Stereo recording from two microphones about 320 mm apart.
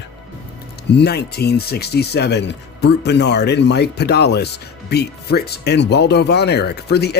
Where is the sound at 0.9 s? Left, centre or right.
Left.